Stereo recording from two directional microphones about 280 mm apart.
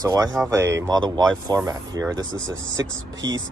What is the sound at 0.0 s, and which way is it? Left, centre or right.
Speech, centre.